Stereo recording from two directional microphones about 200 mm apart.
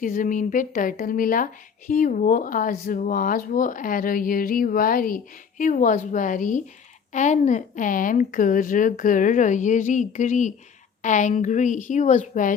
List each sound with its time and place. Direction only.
0.0 s a woman's voice: 40° left (ahead or behind)